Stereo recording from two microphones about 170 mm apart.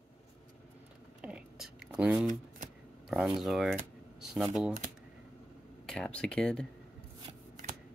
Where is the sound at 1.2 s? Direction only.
5° right (ahead or behind).